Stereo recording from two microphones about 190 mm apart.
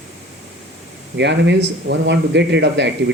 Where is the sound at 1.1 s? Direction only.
65° right (ahead or behind).